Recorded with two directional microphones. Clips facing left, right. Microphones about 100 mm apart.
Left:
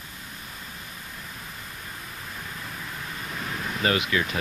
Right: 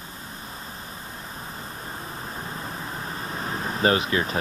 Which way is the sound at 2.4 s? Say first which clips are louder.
Right 3 dB; 35° right (ahead or behind).